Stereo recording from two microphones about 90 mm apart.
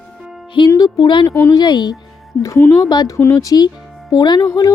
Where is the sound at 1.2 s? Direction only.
35° left (ahead or behind).